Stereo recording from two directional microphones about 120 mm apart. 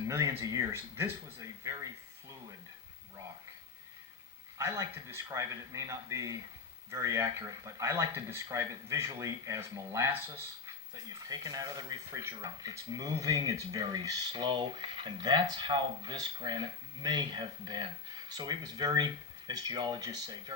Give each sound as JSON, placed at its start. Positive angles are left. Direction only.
{"t": 0.0, "sound": "speech", "side_deg": -25}
{"t": 4.5, "sound": "speech", "side_deg": -25}